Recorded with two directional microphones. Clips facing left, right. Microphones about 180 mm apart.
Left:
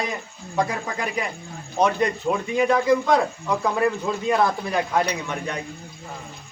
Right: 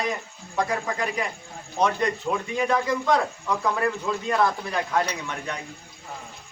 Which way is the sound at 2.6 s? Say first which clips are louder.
Left 6 dB; 10° left (ahead or behind).